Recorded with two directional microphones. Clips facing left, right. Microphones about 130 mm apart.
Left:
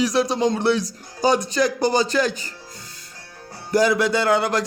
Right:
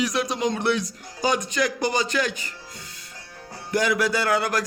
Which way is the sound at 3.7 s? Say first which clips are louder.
Left 4 dB; 35° left (ahead or behind).